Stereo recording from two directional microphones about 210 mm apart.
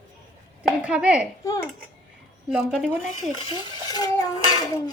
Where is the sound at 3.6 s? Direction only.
20° left (ahead or behind).